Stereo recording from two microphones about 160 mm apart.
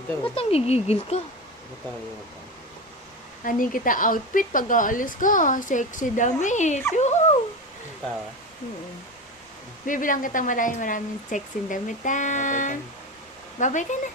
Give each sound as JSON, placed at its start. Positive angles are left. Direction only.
{"t": 0.3, "sound": "speech", "side_deg": 40}
{"t": 3.4, "sound": "speech", "side_deg": 60}
{"t": 9.8, "sound": "speech", "side_deg": 55}